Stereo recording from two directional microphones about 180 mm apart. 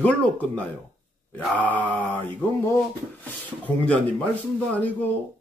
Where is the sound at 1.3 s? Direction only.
10° left (ahead or behind).